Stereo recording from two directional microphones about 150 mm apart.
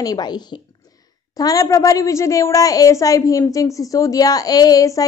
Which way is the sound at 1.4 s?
25° left (ahead or behind).